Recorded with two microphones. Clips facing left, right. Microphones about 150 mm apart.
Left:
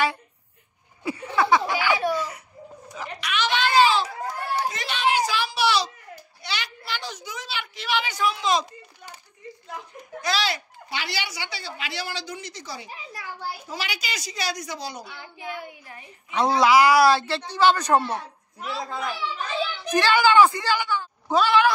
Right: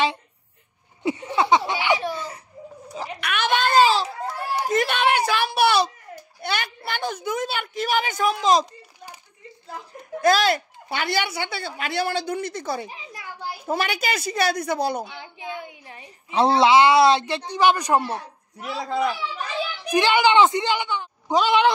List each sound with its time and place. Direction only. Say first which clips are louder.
1.0 s laughter: right 2 dB; 20° right (ahead or behind)
3.2 s a sound: right 2 dB; 55° right (ahead or behind)
4.6 s a sound: right 7 dB; 55° right (ahead or behind)
6.4 s a woman's voice: right 6 dB; 55° right (ahead or behind)
10.2 s speech: right 8 dB; 50° right (ahead or behind)
12.9 s a child's voice: left 1 dB; 20° right (ahead or behind)
13.7 s speech: right 8 dB; 50° right (ahead or behind)
15.0 s a child's voice: right 1 dB; 20° right (ahead or behind)
18.9 s a child's voice: right 11 dB; 80° right
19.8 s a child's voice: right 2 dB; 15° right (ahead or behind)